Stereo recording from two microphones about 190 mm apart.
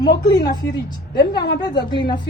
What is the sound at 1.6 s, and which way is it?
Speech, 25° left (ahead or behind).